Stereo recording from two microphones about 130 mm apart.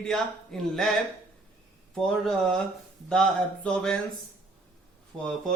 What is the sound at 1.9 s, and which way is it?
Speech, 5° left (ahead or behind).